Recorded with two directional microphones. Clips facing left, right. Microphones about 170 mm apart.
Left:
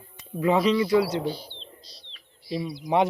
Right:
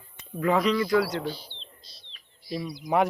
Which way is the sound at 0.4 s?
25° left (ahead or behind).